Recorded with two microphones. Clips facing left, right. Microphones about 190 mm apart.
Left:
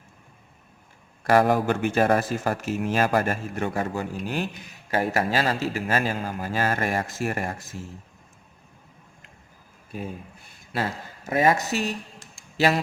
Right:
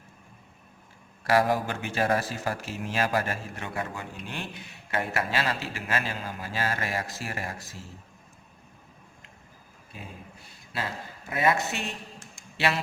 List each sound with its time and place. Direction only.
1.3 s a man's voice: 50° left (ahead or behind)
10.7 s a man's voice: 45° left (ahead or behind)